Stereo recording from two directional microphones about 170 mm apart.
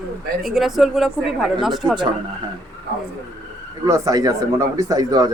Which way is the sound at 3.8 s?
20° right (ahead or behind).